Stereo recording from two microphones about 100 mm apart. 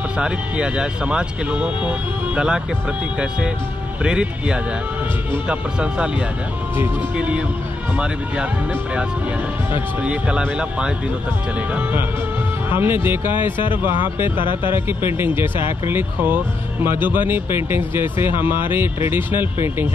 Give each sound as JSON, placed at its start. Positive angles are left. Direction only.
{"t": 0.2, "sound": "speech", "side_deg": -10}
{"t": 4.0, "sound": "speech", "side_deg": -10}
{"t": 7.2, "sound": "speech", "side_deg": -10}
{"t": 10.0, "sound": "speech", "side_deg": -10}
{"t": 12.6, "sound": "speech", "side_deg": -20}
{"t": 14.7, "sound": "speech", "side_deg": -20}